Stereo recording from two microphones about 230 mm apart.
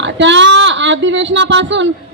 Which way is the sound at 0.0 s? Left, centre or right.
Right.